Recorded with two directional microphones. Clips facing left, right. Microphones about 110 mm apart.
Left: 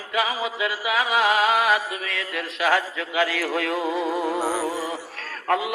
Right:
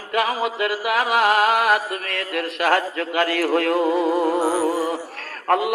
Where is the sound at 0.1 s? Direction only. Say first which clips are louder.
Right 4 dB; 55° right (ahead or behind).